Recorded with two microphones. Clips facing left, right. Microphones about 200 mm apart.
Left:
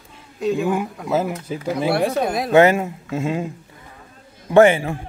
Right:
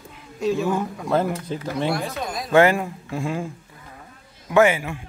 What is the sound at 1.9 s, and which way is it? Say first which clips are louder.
Speech: left 7 dB; 65° left (ahead or behind).